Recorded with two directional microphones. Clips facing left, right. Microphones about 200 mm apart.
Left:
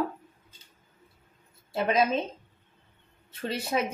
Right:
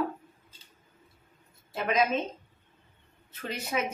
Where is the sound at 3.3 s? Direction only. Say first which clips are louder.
Left 3 dB; 30° left (ahead or behind).